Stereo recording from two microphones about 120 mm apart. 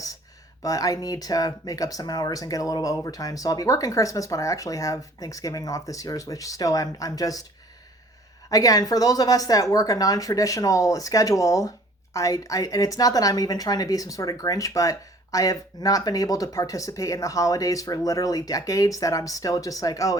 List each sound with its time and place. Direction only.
0.6 s a woman's voice: 30° left (ahead or behind)
8.4 s a woman's voice: 30° left (ahead or behind)